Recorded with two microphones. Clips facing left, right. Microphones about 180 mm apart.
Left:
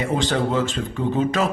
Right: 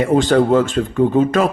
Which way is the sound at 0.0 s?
50° right (ahead or behind).